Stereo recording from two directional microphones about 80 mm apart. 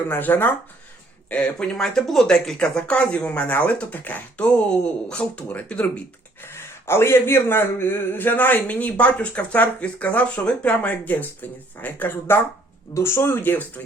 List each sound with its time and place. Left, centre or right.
0.1 s a man's voice: left
1.3 s speech: centre
6.4 s a man's voice: left